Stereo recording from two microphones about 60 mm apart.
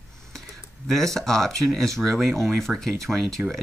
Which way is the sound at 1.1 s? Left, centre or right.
Centre.